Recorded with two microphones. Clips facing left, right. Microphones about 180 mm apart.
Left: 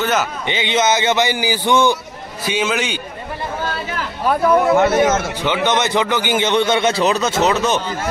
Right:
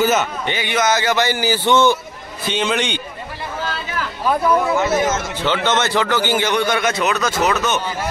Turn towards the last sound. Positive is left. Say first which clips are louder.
# left 2 dB
turn(degrees=30)  # may be behind; listen again after turning